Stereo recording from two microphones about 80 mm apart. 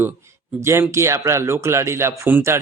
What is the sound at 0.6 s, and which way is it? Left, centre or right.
Speech, right.